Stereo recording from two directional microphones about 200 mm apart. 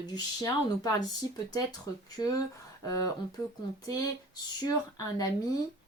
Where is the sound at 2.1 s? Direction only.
20° left (ahead or behind).